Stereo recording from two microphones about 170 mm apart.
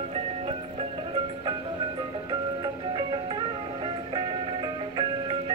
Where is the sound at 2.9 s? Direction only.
25° right (ahead or behind).